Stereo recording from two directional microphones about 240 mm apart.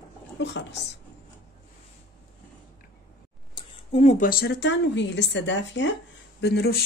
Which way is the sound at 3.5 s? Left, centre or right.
Left.